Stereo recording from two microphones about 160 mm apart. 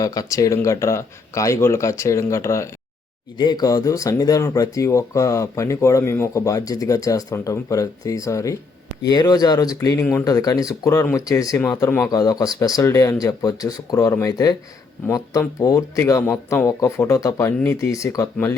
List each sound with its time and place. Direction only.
0.0 s speech: 20° left (ahead or behind)